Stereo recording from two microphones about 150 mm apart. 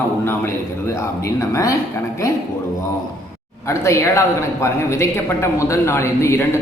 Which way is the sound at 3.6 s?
20° left (ahead or behind).